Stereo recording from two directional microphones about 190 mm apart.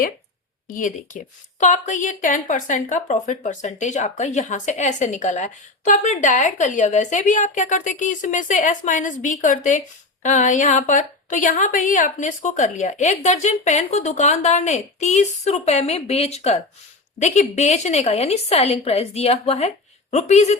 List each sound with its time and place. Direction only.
0.7 s speech: 40° left (ahead or behind)